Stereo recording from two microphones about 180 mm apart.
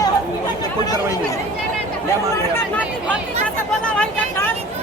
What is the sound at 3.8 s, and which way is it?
Speech, 5° left (ahead or behind).